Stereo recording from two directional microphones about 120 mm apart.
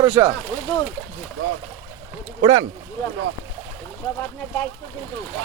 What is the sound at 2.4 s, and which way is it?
Speech, 65° right (ahead or behind).